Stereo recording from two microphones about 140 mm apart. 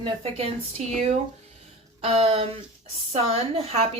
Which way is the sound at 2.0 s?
45° right (ahead or behind).